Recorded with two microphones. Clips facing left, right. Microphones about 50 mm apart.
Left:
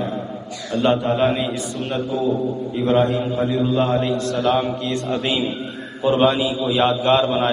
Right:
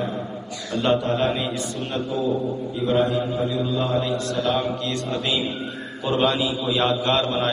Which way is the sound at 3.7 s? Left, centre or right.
Left.